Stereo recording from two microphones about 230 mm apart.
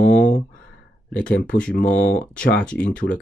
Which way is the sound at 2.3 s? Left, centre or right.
Centre.